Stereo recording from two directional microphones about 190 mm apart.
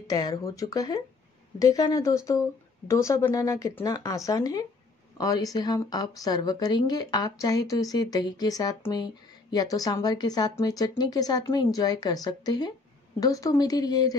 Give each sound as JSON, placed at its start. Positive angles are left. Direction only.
{"t": 0.0, "sound": "speech", "side_deg": 20}